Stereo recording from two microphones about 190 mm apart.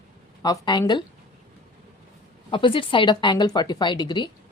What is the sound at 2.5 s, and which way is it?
A woman's voice, 25° left (ahead or behind).